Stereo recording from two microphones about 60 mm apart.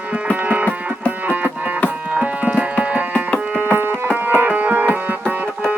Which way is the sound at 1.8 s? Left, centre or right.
Right.